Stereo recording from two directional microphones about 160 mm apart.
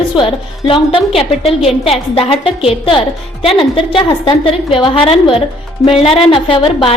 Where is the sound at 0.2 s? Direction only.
30° left (ahead or behind).